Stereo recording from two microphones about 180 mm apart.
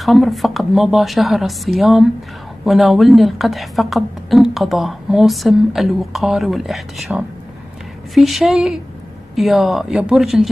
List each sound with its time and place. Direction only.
0.0 s a woman's voice: centre (ahead or behind)